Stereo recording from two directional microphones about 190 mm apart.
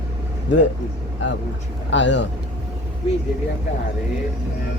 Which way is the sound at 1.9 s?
70° left (ahead or behind).